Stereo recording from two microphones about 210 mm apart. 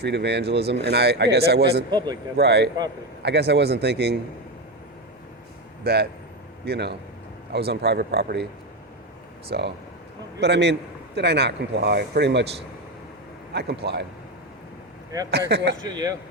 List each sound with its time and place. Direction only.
0.0 s a man's voice: 55° right (ahead or behind)
1.9 s a man's voice: 20° right (ahead or behind)
2.3 s a man's voice: 50° right (ahead or behind)
5.8 s a man's voice: 50° right (ahead or behind)
9.5 s a man's voice: 55° right (ahead or behind)
13.5 s a man's voice: 50° right (ahead or behind)
15.3 s a man's voice: 55° right (ahead or behind)
15.8 s a man's voice: 20° right (ahead or behind)